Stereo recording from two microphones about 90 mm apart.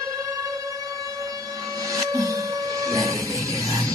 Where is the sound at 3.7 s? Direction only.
40° right (ahead or behind).